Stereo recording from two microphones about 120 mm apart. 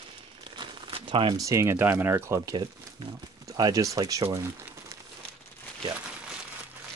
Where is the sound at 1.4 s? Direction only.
25° right (ahead or behind).